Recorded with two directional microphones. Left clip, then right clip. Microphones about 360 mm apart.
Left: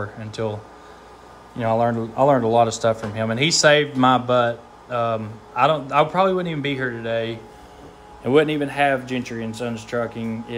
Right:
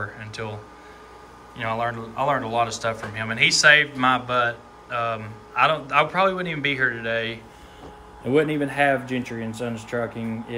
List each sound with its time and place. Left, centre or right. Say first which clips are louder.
0.0 s speech: left 4 dB; centre
1.6 s a man's voice: left 6 dB; centre
8.5 s speech: left 1 dB; centre